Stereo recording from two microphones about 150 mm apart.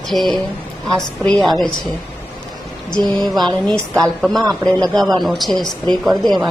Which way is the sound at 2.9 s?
Centre (ahead or behind).